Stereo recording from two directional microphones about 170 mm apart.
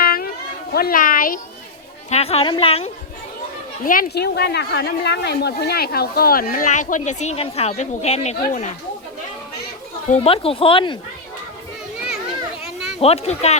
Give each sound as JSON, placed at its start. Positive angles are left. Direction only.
{"t": 0.0, "sound": "a sound", "side_deg": 60}
{"t": 0.7, "sound": "a woman's voice", "side_deg": 60}
{"t": 2.0, "sound": "speech", "side_deg": 40}
{"t": 3.8, "sound": "a woman's voice", "side_deg": 65}
{"t": 10.1, "sound": "speech", "side_deg": 35}
{"t": 13.0, "sound": "speech", "side_deg": 35}